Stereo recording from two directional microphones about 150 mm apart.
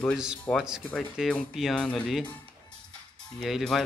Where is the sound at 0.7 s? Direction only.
5° right (ahead or behind).